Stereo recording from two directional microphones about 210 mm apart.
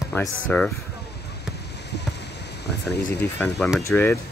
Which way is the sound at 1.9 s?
55° left (ahead or behind).